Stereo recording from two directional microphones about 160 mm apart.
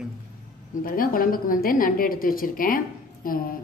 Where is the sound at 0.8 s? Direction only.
60° left (ahead or behind).